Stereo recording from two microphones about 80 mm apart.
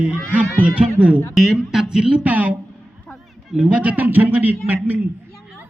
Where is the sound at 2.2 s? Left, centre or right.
Right.